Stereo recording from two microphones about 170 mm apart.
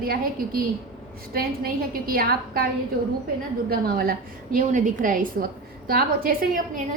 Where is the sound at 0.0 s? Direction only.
55° right (ahead or behind).